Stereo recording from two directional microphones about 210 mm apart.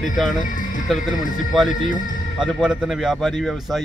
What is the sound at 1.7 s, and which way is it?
Speech, 40° left (ahead or behind).